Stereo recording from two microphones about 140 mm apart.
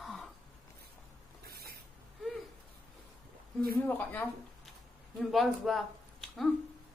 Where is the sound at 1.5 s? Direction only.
90° right.